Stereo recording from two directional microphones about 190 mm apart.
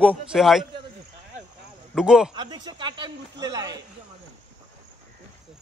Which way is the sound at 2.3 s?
20° right (ahead or behind).